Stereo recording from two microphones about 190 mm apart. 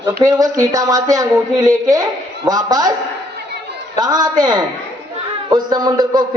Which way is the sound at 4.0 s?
20° right (ahead or behind).